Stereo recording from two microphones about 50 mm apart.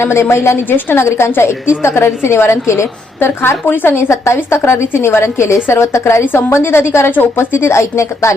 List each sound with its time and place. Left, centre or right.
0.0 s a woman's voice: left